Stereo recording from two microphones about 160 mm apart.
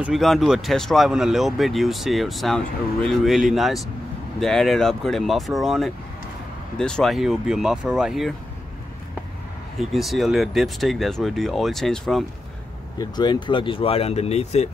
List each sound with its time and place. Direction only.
0.0 s speech: centre (ahead or behind)
9.8 s speech: centre (ahead or behind)
13.0 s speech: 25° left (ahead or behind)